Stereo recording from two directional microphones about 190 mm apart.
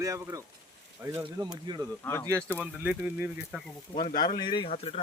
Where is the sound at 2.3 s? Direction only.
15° right (ahead or behind).